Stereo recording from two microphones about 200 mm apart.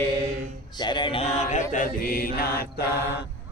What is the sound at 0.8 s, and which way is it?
Mantra, 25° left (ahead or behind).